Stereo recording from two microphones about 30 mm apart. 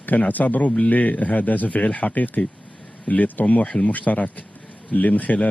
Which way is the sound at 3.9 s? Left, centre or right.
Left.